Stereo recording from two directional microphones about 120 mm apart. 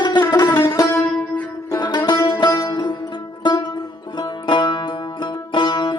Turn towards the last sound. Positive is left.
turn(degrees=40)  # may be behind; listen again after turning